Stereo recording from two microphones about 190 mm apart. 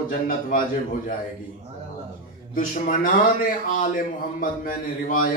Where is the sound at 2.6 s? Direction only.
45° left (ahead or behind).